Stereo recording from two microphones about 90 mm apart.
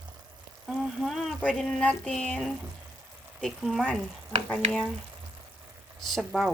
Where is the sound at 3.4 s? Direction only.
5° right (ahead or behind).